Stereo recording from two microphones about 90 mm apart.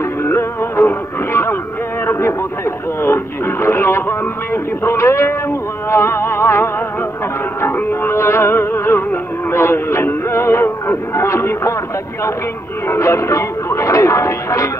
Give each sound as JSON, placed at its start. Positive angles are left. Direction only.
{"t": 0.2, "sound": "music", "side_deg": 30}
{"t": 2.0, "sound": "a sound", "side_deg": 30}
{"t": 3.0, "sound": "radio", "side_deg": 25}
{"t": 4.8, "sound": "music", "side_deg": 30}
{"t": 12.8, "sound": "music", "side_deg": 30}